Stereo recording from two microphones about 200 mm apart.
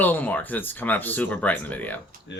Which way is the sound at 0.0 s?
10° left (ahead or behind).